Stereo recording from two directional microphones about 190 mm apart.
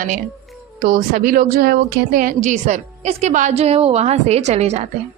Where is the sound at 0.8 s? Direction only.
45° right (ahead or behind).